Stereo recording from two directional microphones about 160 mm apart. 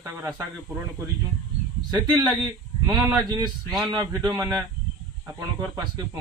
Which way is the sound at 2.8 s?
25° right (ahead or behind).